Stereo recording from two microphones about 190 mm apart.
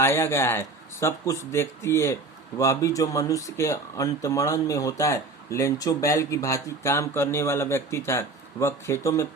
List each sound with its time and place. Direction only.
0.0 s speech: 15° left (ahead or behind)